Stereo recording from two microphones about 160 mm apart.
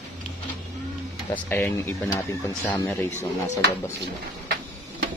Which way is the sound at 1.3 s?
10° left (ahead or behind).